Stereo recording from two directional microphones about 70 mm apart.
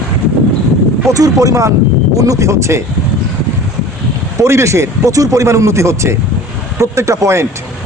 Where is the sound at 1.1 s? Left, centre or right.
Right.